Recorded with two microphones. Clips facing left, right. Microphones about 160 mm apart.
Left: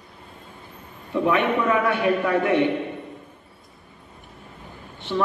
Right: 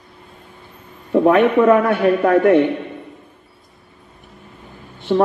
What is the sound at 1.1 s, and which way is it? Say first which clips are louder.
A man's voice: right 8 dB; 50° right (ahead or behind).